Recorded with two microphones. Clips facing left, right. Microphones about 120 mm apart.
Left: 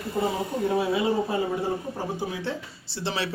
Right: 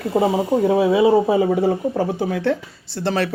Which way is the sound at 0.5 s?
90° right.